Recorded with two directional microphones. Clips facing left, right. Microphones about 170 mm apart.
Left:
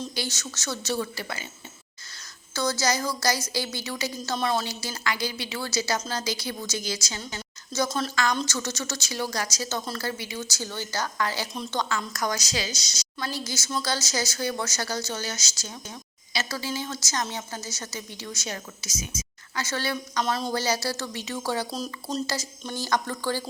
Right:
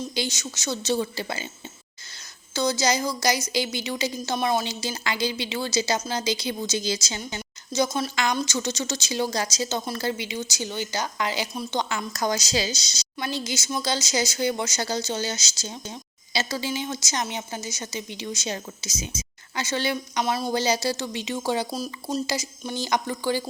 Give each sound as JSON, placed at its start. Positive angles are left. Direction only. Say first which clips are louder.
{"t": 0.1, "sound": "a woman's voice", "louder": "right 4 dB", "side_deg": -15}
{"t": 2.5, "sound": "a woman's voice", "louder": "right 3 dB", "side_deg": -20}
{"t": 8.1, "sound": "a woman's voice", "louder": "right 1 dB", "side_deg": -20}
{"t": 11.5, "sound": "speech", "louder": "right 3 dB", "side_deg": -5}
{"t": 11.8, "sound": "a woman's voice", "louder": "right 1 dB", "side_deg": -20}